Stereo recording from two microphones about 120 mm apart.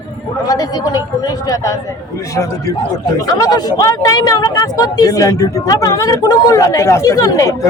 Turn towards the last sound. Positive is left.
turn(degrees=25)  # may be behind; listen again after turning